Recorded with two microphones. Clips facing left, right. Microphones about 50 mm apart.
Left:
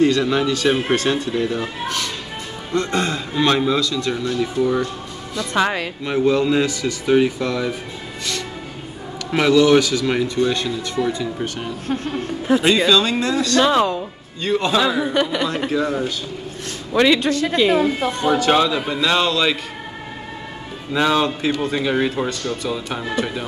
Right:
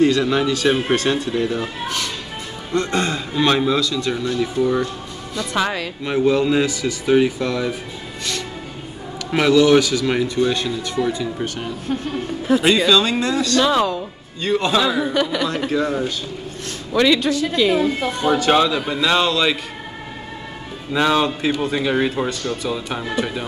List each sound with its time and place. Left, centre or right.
0.0 s speech: centre
5.6 s speech: left
6.0 s speech: centre
9.3 s speech: centre
12.6 s speech: centre
13.6 s speech: left
14.4 s speech: centre
16.9 s speech: left
17.3 s a woman's voice: left
18.3 s speech: centre
20.9 s speech: centre